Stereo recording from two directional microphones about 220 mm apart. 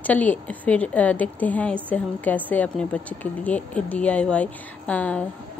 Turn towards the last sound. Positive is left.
turn(degrees=5)  # may be behind; listen again after turning